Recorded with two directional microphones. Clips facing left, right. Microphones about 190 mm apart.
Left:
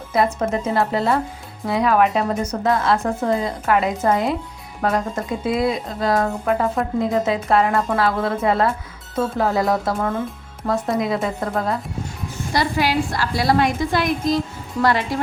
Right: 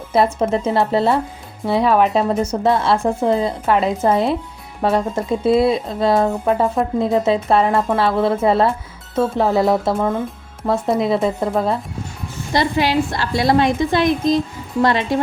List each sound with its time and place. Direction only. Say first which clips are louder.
0.1 s speech: right 3 dB; 25° right (ahead or behind)
12.5 s speech: right 3 dB; 25° right (ahead or behind)